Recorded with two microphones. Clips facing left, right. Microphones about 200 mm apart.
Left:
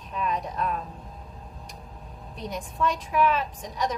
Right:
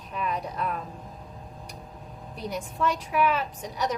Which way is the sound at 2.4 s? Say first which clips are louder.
Even; 5° right (ahead or behind).